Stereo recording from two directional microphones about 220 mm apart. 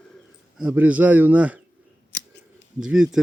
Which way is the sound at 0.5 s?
5° right (ahead or behind).